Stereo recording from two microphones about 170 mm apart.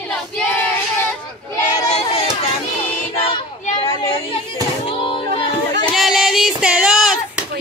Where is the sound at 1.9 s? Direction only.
35° left (ahead or behind).